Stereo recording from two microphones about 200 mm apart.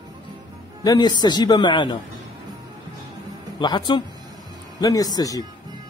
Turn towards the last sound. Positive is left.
turn(degrees=20)  # may be behind; listen again after turning